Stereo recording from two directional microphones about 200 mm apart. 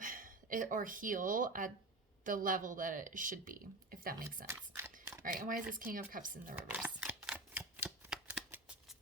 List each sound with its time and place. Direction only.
0.0 s speech: 45° right (ahead or behind)
4.4 s a sound: 10° right (ahead or behind)
5.2 s speech: 45° right (ahead or behind)
6.6 s typewriter: 10° right (ahead or behind)
8.4 s scissors: 5° right (ahead or behind)